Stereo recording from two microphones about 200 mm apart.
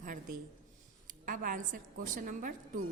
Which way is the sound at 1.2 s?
45° right (ahead or behind).